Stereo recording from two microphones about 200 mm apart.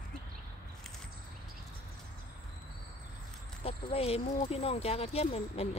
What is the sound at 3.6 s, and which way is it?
Speech, 30° left (ahead or behind).